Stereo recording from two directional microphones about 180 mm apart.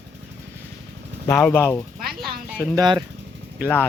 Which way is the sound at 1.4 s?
10° left (ahead or behind).